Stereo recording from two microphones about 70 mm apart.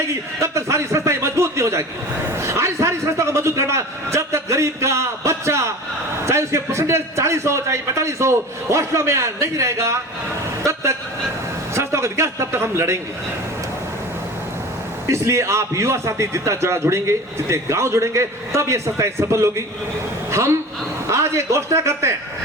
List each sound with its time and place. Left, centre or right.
0.1 s a man's voice: right
15.0 s a man's voice: right